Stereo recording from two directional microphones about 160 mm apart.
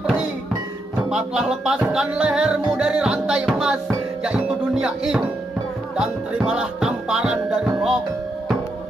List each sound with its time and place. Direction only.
1.1 s music: 5° right (ahead or behind)